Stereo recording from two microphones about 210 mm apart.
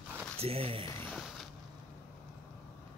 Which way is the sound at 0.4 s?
25° right (ahead or behind).